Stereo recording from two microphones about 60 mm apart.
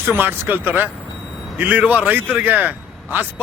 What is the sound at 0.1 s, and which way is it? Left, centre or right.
A man's voice, right.